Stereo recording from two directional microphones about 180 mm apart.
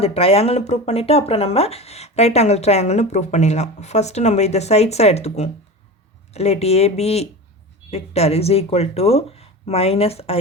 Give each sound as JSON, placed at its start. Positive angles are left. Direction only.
{"t": 0.0, "sound": "speech", "side_deg": 35}